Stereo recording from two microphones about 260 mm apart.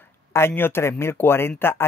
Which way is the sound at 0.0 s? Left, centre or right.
Centre.